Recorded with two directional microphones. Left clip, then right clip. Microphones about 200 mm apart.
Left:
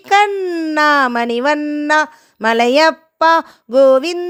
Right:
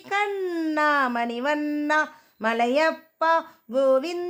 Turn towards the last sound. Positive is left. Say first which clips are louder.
# left 11 dB
turn(degrees=35)  # may be behind; listen again after turning